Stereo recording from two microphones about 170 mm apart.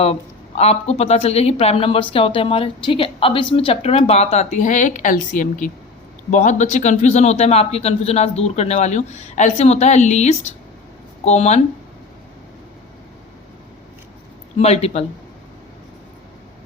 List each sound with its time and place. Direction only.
0.0 s speech: 40° left (ahead or behind)
14.6 s speech: 40° left (ahead or behind)